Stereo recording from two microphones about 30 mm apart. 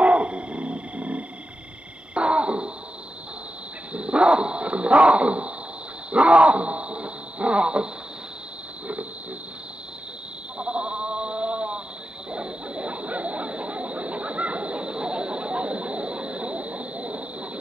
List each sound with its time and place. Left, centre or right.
0.0 s a sound: right
2.1 s wail: right
3.9 s roaring cats: right
6.1 s wild animals: right
10.6 s sheep: right
12.3 s a sound: right